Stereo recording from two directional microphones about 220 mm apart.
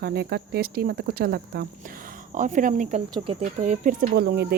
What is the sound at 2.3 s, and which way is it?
Speech, 35° right (ahead or behind).